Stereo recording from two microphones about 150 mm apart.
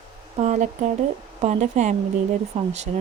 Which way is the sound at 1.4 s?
50° right (ahead or behind).